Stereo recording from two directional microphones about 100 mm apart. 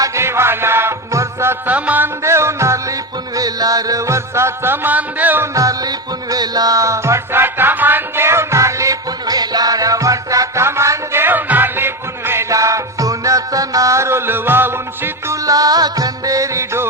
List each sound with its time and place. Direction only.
0.0 s music: 30° right (ahead or behind)
2.2 s music: 30° right (ahead or behind)
5.5 s music: 35° right (ahead or behind)